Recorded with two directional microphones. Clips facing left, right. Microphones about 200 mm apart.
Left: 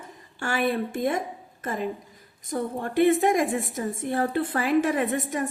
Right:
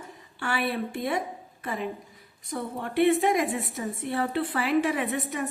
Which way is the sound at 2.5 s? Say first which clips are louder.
Left 4 dB; 45° left (ahead or behind).